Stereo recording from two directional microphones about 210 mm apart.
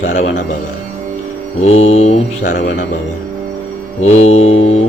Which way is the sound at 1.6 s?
30° left (ahead or behind).